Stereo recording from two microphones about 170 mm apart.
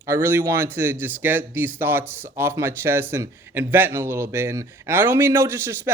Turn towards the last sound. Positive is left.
turn(degrees=-15)  # may be behind; listen again after turning